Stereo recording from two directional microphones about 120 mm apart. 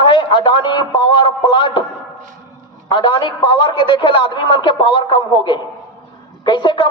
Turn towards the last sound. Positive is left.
turn(degrees=40)  # may be behind; listen again after turning